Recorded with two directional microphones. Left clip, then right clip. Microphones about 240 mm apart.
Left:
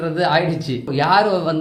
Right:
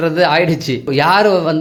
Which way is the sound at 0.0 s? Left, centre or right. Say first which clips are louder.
Right 5 dB; right.